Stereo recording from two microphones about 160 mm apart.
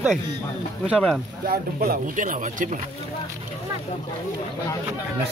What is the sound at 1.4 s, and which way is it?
Speech, 65° right (ahead or behind).